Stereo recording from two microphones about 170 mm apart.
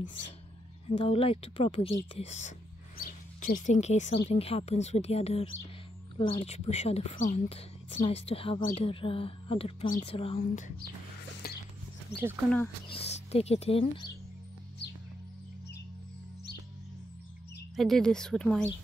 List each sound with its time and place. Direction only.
0.8 s speech: 35° left (ahead or behind)
3.0 s speech: 50° left (ahead or behind); by 10.4 s 35° left (ahead or behind)
10.5 s speech: 50° left (ahead or behind)
11.4 s a sound: 60° left (ahead or behind)
12.1 s speech: 80° left
12.9 s speech: 35° left (ahead or behind)
17.7 s speech: centre (ahead or behind)